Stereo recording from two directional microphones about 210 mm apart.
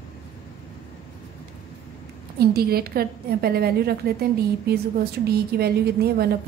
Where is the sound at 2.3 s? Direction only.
45° right (ahead or behind).